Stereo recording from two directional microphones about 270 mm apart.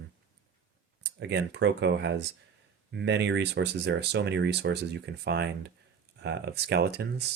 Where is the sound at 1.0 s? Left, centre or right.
Right.